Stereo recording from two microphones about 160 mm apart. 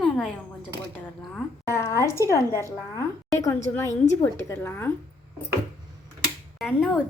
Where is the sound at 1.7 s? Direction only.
15° left (ahead or behind).